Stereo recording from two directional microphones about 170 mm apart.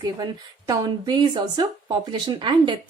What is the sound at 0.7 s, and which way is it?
A woman's voice, 25° right (ahead or behind).